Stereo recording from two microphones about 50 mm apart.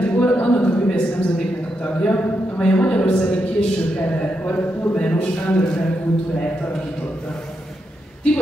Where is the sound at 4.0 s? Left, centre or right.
Left.